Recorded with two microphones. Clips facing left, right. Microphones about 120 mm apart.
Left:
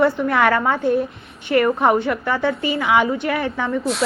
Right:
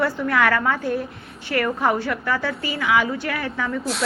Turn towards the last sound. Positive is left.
turn(degrees=25)  # may be behind; listen again after turning